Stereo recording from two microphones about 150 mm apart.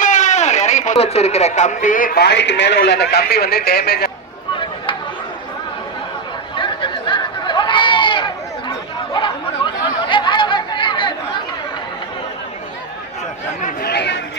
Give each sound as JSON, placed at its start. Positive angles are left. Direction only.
{"t": 0.0, "sound": "a sound", "side_deg": 55}
{"t": 0.9, "sound": "speech", "side_deg": 45}
{"t": 6.6, "sound": "chatter", "side_deg": 35}
{"t": 9.1, "sound": "snicker", "side_deg": 35}
{"t": 13.6, "sound": "chatter", "side_deg": 75}